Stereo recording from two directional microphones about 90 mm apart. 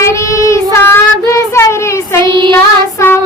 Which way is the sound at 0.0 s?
35° left (ahead or behind).